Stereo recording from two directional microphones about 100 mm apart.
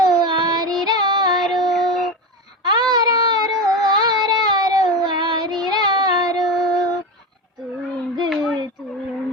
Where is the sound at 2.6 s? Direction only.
45° right (ahead or behind).